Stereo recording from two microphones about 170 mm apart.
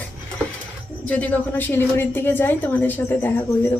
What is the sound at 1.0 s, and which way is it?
A woman's voice, 10° left (ahead or behind).